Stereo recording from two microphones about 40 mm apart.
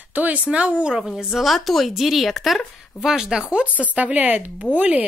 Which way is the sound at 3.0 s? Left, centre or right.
Centre.